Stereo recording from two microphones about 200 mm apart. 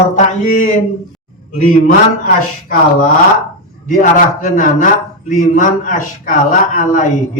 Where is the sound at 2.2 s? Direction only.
45° left (ahead or behind).